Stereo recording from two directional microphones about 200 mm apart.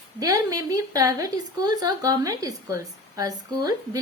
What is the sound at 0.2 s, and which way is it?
Speech, 15° right (ahead or behind).